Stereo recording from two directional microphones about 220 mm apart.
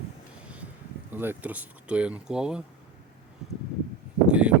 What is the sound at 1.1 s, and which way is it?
Speech, 10° right (ahead or behind).